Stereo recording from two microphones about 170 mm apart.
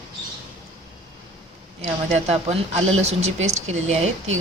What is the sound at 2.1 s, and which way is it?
Speech, 40° right (ahead or behind).